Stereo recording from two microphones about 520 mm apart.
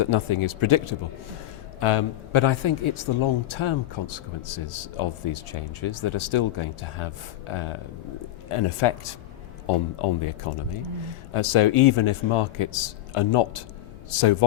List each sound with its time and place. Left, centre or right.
0.0 s a man's voice: left